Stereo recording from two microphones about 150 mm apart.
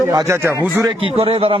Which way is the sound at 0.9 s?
35° right (ahead or behind).